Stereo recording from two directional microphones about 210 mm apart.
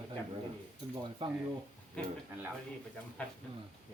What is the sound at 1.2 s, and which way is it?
Speech, 25° right (ahead or behind).